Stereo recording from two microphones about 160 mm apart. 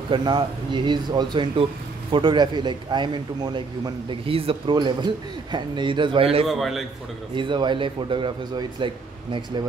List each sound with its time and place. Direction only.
0.1 s a man's voice: 30° right (ahead or behind)
6.4 s a man's voice: centre (ahead or behind)
7.3 s a man's voice: 30° right (ahead or behind)